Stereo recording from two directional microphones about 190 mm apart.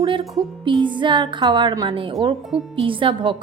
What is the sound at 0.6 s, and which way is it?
A woman's voice, 25° right (ahead or behind).